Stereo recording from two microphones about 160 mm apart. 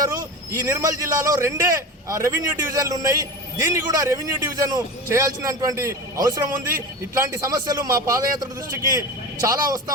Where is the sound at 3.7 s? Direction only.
20° right (ahead or behind).